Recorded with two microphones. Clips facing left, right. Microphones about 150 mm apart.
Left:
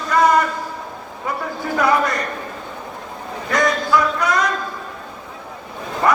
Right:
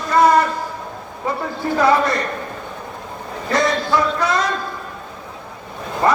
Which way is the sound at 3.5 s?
25° right (ahead or behind).